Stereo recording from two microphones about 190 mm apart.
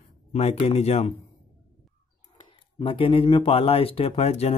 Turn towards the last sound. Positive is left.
turn(degrees=35)  # may be behind; listen again after turning